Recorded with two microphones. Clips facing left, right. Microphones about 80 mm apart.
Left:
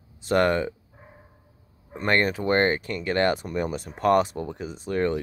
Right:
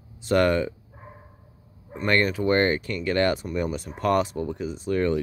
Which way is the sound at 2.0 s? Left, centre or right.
Left.